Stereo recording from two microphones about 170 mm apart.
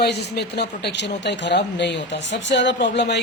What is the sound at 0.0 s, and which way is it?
Speech, 75° left (ahead or behind).